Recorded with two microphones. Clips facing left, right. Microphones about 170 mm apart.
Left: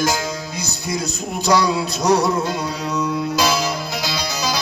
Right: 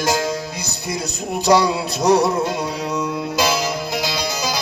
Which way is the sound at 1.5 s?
30° right (ahead or behind).